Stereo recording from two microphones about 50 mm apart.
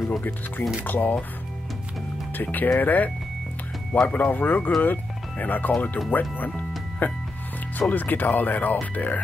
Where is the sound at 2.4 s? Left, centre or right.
Left.